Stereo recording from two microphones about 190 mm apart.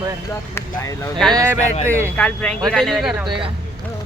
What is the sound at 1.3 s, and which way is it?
Speech, 15° right (ahead or behind).